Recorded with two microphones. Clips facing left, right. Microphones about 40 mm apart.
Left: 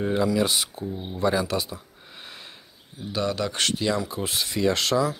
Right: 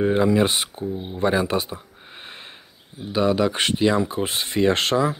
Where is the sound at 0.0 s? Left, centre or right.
Right.